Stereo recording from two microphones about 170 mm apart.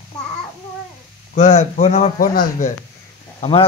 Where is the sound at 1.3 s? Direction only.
45° left (ahead or behind).